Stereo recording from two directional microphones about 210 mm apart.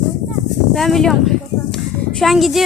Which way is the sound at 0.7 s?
Centre (ahead or behind).